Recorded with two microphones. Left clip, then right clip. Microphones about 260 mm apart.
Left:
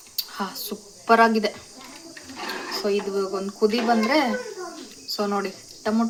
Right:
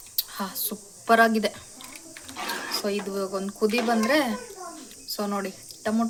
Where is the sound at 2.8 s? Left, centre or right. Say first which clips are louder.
Left 8 dB; right.